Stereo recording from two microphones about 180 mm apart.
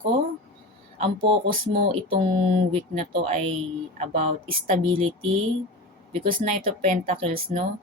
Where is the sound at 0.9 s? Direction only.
35° right (ahead or behind).